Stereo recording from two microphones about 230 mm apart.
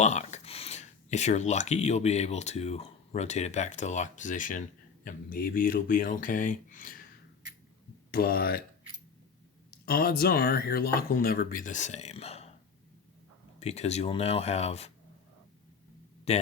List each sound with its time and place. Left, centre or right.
0.0 s speech: left
8.1 s speech: left
9.8 s speech: left
13.6 s speech: left
16.3 s speech: left